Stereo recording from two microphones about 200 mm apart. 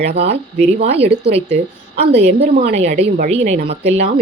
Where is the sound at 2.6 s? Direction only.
35° right (ahead or behind).